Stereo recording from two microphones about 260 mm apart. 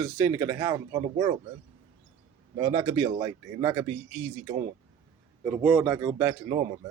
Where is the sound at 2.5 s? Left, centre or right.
Centre.